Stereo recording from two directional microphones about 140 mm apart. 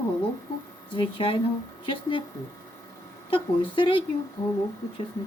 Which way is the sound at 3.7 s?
35° left (ahead or behind).